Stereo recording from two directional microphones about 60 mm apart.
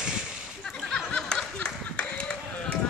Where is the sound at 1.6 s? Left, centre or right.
Centre.